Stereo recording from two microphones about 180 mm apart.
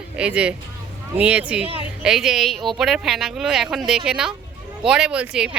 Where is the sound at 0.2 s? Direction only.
5° right (ahead or behind).